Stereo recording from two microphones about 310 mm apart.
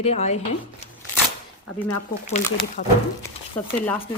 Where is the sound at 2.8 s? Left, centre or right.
Left.